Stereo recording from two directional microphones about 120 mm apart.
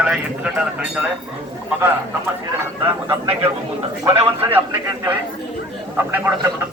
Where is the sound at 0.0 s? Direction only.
10° right (ahead or behind).